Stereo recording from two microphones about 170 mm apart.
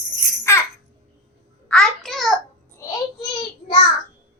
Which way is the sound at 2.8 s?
20° left (ahead or behind).